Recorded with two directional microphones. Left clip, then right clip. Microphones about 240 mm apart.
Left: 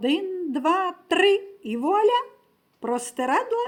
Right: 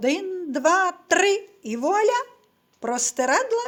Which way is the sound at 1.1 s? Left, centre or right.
Centre.